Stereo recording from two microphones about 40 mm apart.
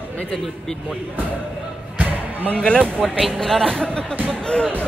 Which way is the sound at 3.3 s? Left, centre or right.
Centre.